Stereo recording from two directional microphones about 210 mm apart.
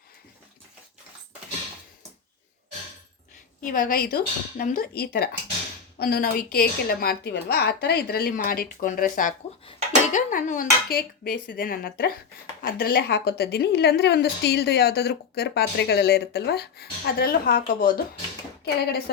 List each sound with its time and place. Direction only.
3.6 s a woman's voice: 40° left (ahead or behind)